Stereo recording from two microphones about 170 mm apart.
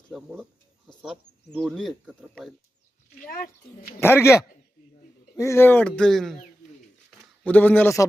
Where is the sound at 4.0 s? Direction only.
15° left (ahead or behind).